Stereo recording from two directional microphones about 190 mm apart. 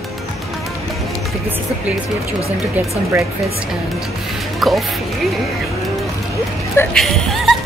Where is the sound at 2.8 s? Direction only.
10° right (ahead or behind).